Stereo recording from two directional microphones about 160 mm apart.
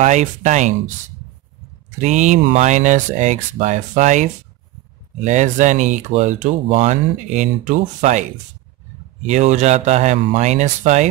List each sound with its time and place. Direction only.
0.0 s speech: 50° right (ahead or behind)
2.0 s speech: 45° right (ahead or behind)